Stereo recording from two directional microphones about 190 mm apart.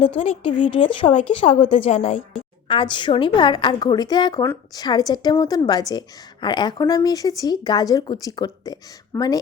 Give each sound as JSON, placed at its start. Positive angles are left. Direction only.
{"t": 0.0, "sound": "a woman's voice", "side_deg": 30}